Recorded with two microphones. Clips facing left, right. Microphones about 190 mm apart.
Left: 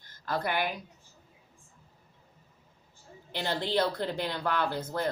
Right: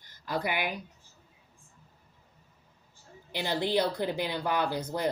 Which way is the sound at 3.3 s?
10° right (ahead or behind).